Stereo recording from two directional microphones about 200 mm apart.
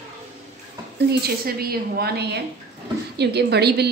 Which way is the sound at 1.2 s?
50° right (ahead or behind).